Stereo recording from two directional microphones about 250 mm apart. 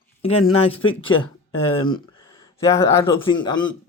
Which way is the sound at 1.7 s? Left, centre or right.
Centre.